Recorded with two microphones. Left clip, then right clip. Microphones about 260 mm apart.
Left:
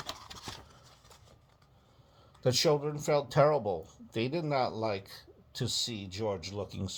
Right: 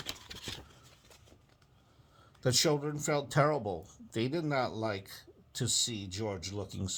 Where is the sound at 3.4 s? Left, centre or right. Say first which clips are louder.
Left 4 dB; right.